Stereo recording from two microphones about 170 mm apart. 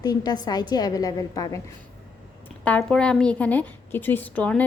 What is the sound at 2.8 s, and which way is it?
A woman's voice, 5° left (ahead or behind).